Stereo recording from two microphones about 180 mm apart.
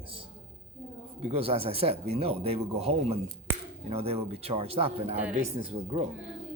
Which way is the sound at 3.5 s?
10° right (ahead or behind).